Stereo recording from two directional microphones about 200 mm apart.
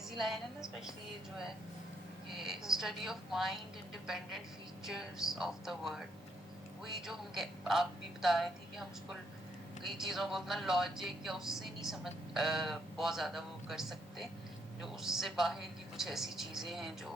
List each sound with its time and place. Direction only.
0.2 s speech: centre (ahead or behind)
2.3 s speech: centre (ahead or behind)
9.8 s speech: centre (ahead or behind)